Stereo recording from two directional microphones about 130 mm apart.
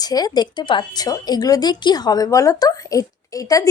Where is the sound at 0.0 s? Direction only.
30° left (ahead or behind).